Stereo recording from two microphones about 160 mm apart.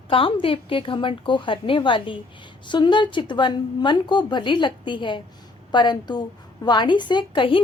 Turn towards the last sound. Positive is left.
turn(degrees=30)  # may be behind; listen again after turning